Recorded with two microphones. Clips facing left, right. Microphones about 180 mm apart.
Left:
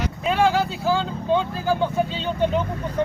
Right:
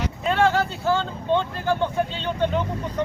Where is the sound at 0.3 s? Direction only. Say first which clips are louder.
Left 1 dB; centre (ahead or behind).